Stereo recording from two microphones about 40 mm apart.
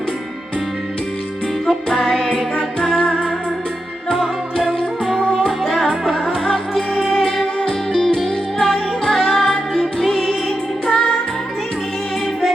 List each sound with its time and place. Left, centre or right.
1.6 s music: centre
4.5 s music: centre
7.2 s music: centre
7.9 s music: centre
10.8 s music: centre